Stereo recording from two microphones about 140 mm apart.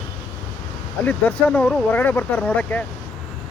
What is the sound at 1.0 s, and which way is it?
Speech, 10° left (ahead or behind).